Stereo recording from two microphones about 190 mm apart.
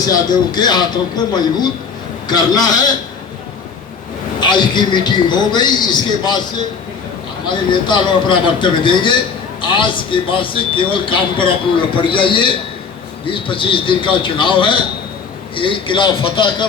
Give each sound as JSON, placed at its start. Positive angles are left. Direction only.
{"t": 0.1, "sound": "a man's voice", "side_deg": 20}
{"t": 4.4, "sound": "a man's voice", "side_deg": 25}
{"t": 7.5, "sound": "a man's voice", "side_deg": 25}